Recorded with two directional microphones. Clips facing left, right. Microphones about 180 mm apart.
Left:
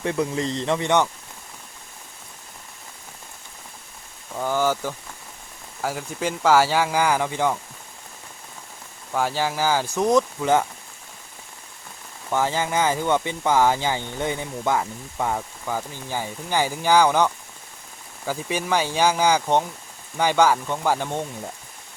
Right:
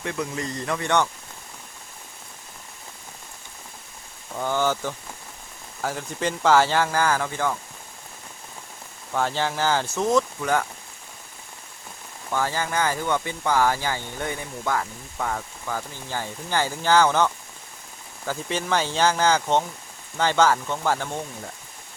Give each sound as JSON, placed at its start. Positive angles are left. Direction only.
{"t": 0.0, "sound": "speech", "side_deg": 30}
{"t": 4.4, "sound": "speech", "side_deg": 10}
{"t": 9.1, "sound": "speech", "side_deg": 10}
{"t": 12.3, "sound": "speech", "side_deg": 20}